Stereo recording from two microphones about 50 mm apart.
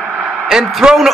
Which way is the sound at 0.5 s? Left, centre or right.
Centre.